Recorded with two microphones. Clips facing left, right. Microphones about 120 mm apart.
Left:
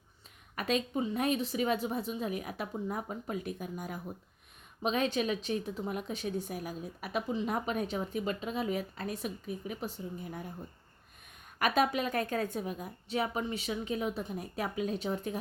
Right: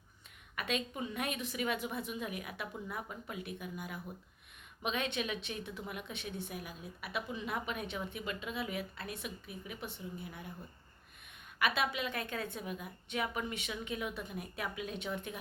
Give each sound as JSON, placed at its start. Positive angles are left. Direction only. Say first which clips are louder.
{"t": 0.5, "sound": "a woman's voice", "louder": "left 6 dB", "side_deg": 35}
{"t": 11.6, "sound": "a woman's voice", "louder": "left 5 dB", "side_deg": 40}